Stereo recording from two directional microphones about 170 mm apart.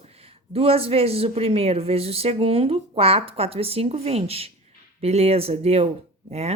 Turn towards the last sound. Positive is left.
turn(degrees=-40)  # may be behind; listen again after turning